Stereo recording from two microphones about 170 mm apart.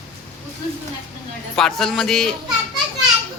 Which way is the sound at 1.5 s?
5° left (ahead or behind).